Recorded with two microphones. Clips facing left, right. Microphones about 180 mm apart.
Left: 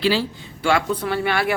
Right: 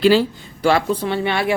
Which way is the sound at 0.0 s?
45° right (ahead or behind).